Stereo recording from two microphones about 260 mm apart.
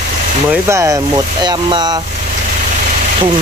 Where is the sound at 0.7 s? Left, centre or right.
Centre.